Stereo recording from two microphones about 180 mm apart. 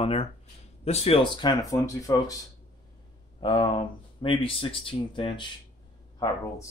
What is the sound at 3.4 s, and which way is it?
Speech, 25° left (ahead or behind).